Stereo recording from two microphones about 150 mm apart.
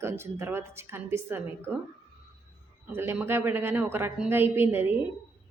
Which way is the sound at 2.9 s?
15° right (ahead or behind).